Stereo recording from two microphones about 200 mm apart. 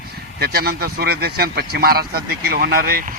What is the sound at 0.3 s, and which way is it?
A man's voice, 50° right (ahead or behind).